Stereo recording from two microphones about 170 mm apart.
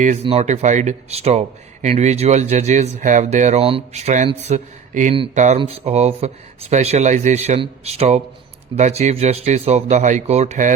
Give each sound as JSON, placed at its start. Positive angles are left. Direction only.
{"t": 0.0, "sound": "speech", "side_deg": -45}